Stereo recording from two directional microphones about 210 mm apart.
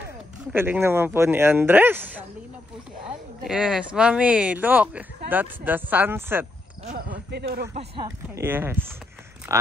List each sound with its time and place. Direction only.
0.5 s speech: 10° right (ahead or behind)
3.4 s a woman's voice: 5° right (ahead or behind)
6.9 s a sound: 50° right (ahead or behind)
7.7 s speech: 25° right (ahead or behind)
8.4 s speech: 10° right (ahead or behind)